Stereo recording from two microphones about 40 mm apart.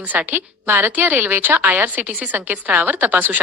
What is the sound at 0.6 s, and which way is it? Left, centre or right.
A woman's voice, right.